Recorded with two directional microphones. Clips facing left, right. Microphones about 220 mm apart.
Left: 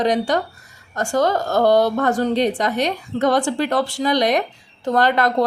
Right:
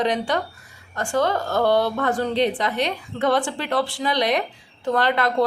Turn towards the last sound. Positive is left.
turn(degrees=45)  # may be behind; listen again after turning